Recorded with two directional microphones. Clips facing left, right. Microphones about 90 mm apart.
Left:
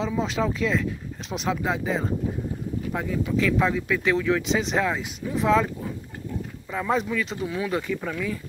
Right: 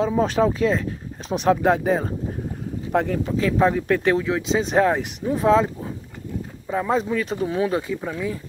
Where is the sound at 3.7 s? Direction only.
55° right (ahead or behind).